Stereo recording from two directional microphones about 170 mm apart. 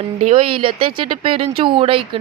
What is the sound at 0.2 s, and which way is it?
Speech, 35° right (ahead or behind).